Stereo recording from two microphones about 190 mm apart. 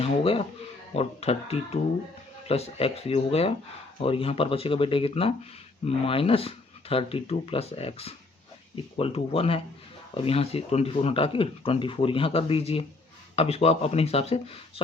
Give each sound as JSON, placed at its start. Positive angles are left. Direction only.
{"t": 0.0, "sound": "speech", "side_deg": 30}